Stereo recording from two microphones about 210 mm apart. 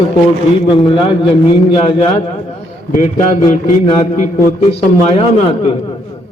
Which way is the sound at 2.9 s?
35° left (ahead or behind).